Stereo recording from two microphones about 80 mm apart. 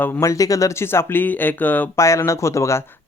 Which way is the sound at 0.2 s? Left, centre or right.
Left.